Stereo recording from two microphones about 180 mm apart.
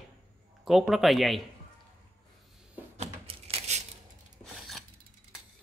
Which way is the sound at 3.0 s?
35° right (ahead or behind).